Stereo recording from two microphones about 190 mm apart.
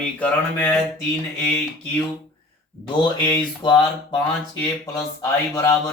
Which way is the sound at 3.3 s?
25° left (ahead or behind).